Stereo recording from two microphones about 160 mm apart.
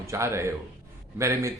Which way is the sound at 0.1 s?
15° right (ahead or behind).